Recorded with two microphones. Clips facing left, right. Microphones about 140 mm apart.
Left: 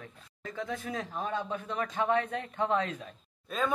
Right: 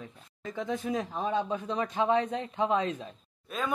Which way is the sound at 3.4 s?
5° right (ahead or behind).